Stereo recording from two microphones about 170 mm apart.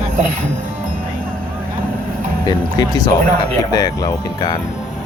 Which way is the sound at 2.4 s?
20° left (ahead or behind).